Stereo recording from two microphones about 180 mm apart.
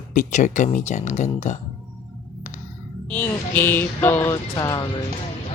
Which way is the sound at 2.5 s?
45° left (ahead or behind).